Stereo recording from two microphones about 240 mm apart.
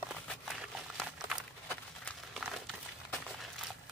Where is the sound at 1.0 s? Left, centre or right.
Centre.